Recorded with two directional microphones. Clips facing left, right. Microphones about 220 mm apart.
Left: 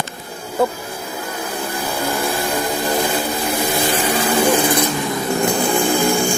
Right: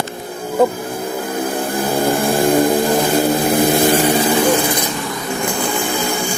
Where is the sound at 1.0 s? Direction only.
50° right (ahead or behind).